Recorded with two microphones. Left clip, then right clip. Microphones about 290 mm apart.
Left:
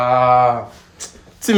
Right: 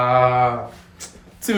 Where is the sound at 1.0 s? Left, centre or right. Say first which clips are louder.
Left 5 dB; left.